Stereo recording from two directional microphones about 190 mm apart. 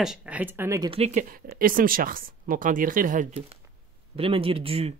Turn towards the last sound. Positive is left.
turn(degrees=-30)  # may be behind; listen again after turning